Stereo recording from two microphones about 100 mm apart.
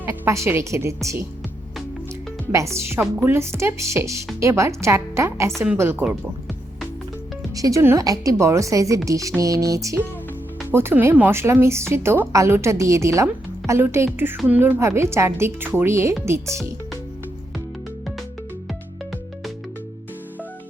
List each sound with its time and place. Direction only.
0.0 s a woman's voice: 25° right (ahead or behind)
2.5 s a woman's voice: 30° right (ahead or behind)
7.5 s a woman's voice: 35° right (ahead or behind)
10.7 s a woman's voice: 20° right (ahead or behind)